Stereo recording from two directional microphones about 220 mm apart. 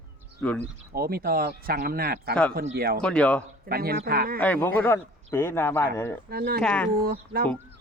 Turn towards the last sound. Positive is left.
turn(degrees=-45)  # may be behind; listen again after turning